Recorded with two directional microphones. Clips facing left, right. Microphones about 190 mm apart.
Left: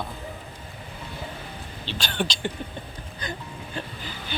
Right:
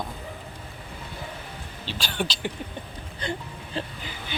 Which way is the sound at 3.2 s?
30° right (ahead or behind).